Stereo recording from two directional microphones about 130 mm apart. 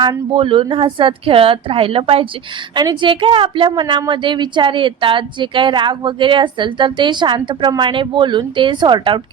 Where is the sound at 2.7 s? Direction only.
35° right (ahead or behind).